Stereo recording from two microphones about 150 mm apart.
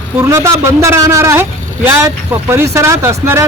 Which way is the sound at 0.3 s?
20° right (ahead or behind).